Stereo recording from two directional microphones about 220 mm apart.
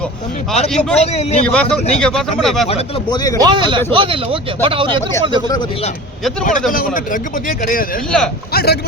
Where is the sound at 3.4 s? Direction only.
20° right (ahead or behind).